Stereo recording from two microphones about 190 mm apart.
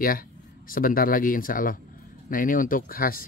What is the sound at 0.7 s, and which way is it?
Speech, 50° left (ahead or behind).